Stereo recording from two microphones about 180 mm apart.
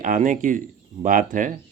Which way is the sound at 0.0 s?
45° right (ahead or behind).